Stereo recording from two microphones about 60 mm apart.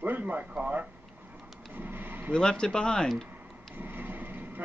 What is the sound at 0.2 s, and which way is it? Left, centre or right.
Radio, right.